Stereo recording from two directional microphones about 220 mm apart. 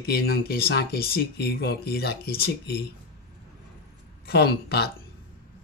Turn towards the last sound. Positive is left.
turn(degrees=45)  # may be behind; listen again after turning